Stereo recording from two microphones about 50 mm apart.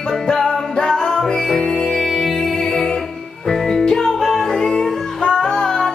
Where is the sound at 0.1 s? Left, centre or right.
Centre.